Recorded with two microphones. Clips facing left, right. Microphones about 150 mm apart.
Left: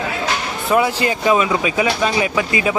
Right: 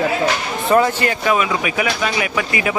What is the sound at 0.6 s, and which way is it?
Speech, 5° left (ahead or behind).